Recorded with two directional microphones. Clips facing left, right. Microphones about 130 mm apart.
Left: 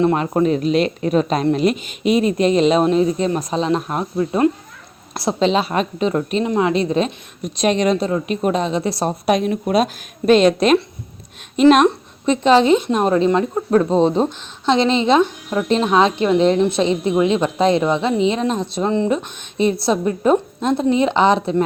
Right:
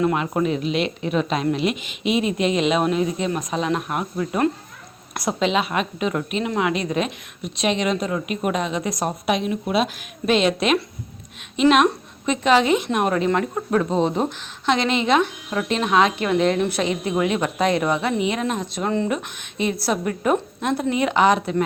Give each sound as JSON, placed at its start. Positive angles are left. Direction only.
{"t": 0.0, "sound": "a woman's voice", "side_deg": 35}
{"t": 9.3, "sound": "a woman's voice", "side_deg": 45}